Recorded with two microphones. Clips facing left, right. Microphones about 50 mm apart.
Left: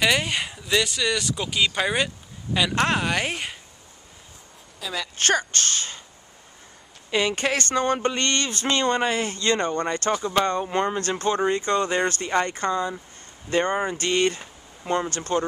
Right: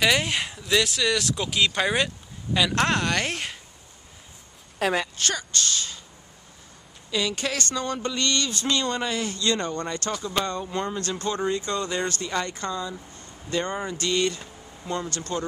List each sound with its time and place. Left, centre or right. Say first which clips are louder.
0.0 s speech: even; centre
4.8 s a woman's voice: right 9 dB; right
5.1 s speech: left 6 dB; left
7.1 s speech: left 4 dB; left